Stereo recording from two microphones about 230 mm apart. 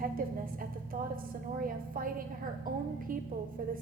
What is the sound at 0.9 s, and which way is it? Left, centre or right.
A woman's voice, right.